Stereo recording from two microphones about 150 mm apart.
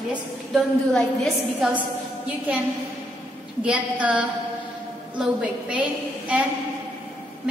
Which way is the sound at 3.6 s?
10° right (ahead or behind).